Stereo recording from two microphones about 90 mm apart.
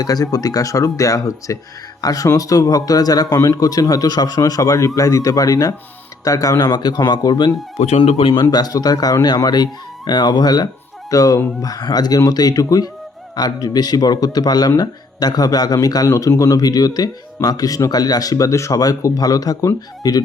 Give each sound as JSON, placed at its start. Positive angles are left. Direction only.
{"t": 0.0, "sound": "speech", "side_deg": 45}
{"t": 7.9, "sound": "speech", "side_deg": 90}
{"t": 8.3, "sound": "speech", "side_deg": 50}